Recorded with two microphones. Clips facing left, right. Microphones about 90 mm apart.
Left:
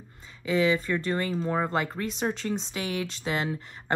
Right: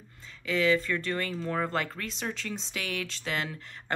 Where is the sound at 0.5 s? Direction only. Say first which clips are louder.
Left 2 dB; 15° left (ahead or behind).